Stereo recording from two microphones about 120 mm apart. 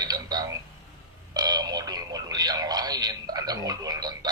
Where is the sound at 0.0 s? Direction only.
35° right (ahead or behind).